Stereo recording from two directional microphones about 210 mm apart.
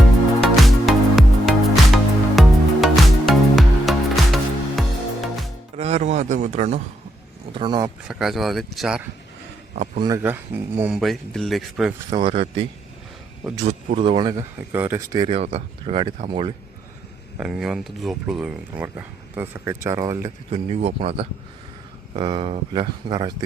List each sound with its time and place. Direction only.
0.5 s music: centre (ahead or behind)
5.7 s a sound: 30° right (ahead or behind)
7.5 s speech: 20° right (ahead or behind)
8.0 s speech: centre (ahead or behind)
9.7 s speech: 35° right (ahead or behind)
10.0 s speech: 15° right (ahead or behind)
12.1 s speech: 25° right (ahead or behind)
13.7 s speech: 30° right (ahead or behind); by 15.3 s 15° right (ahead or behind)
15.3 s speech: 30° right (ahead or behind)
17.3 s speech: 5° right (ahead or behind)
20.5 s speech: 30° right (ahead or behind)